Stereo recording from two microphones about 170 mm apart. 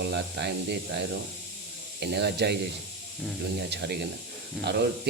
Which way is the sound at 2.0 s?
75° right (ahead or behind).